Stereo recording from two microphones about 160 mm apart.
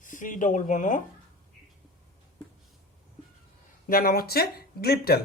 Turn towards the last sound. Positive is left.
turn(degrees=75)  # may be behind; listen again after turning